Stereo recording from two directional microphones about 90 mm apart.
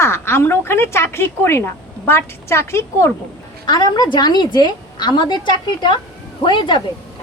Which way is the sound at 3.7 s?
50° left (ahead or behind).